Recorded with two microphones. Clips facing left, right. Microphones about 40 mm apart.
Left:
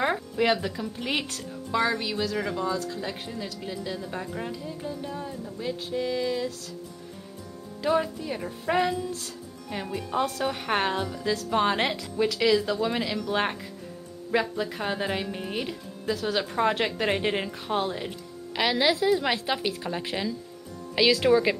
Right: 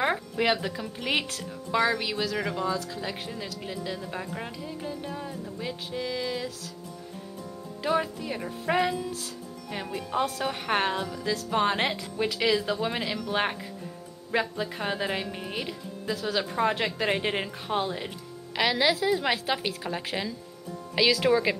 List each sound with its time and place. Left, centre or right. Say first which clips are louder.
0.0 s speech: left 1 dB; centre
2.0 s speech: left 1 dB; centre
7.8 s speech: left 2 dB; centre
12.3 s a woman's voice: left 2 dB; centre